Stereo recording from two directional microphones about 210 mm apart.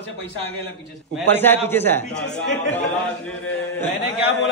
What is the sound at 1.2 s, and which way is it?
Speech, 10° left (ahead or behind).